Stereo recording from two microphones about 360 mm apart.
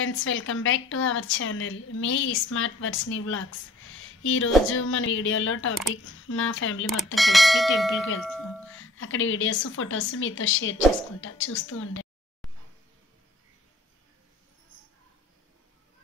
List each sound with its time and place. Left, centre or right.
0.0 s a woman's voice: left
7.2 s speech: centre
8.7 s a woman's voice: left